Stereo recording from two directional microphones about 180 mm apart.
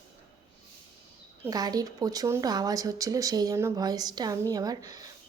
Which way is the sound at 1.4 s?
20° right (ahead or behind).